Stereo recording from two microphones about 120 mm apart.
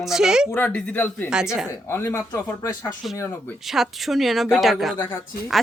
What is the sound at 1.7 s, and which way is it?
Speech, 20° left (ahead or behind).